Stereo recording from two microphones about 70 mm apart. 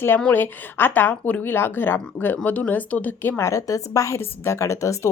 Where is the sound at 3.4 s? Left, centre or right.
Left.